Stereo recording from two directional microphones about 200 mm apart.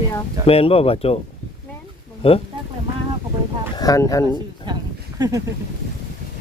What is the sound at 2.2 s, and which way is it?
Speech, 30° left (ahead or behind).